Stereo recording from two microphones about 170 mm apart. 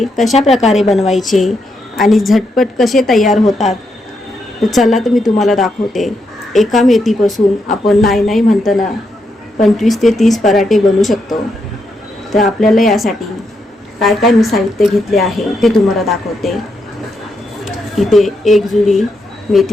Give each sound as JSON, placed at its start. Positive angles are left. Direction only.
{"t": 0.0, "sound": "a woman's voice", "side_deg": 0}
{"t": 3.4, "sound": "a woman's voice", "side_deg": 40}
{"t": 4.6, "sound": "a woman's voice", "side_deg": 0}
{"t": 12.5, "sound": "a woman's voice", "side_deg": 0}
{"t": 17.7, "sound": "a woman's voice", "side_deg": 0}